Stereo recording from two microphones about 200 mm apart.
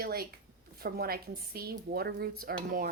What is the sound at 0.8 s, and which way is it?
Speech, 50° right (ahead or behind).